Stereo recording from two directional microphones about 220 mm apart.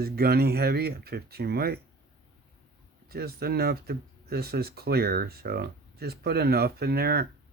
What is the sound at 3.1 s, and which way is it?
Speech, 45° right (ahead or behind).